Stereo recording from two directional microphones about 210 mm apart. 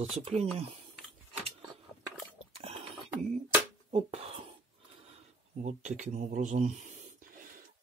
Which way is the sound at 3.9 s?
30° right (ahead or behind).